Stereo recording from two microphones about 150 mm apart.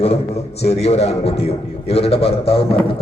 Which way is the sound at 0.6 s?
45° left (ahead or behind).